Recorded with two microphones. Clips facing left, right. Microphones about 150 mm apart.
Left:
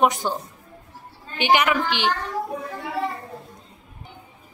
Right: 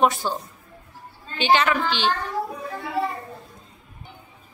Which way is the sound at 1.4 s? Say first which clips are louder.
Even; 15° left (ahead or behind).